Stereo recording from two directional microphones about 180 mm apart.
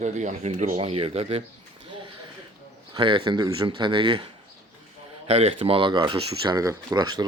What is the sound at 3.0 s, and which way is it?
Speech, 30° right (ahead or behind).